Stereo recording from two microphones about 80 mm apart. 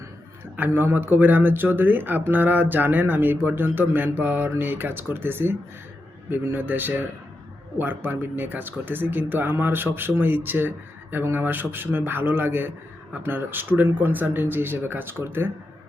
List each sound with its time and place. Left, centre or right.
0.5 s speech: right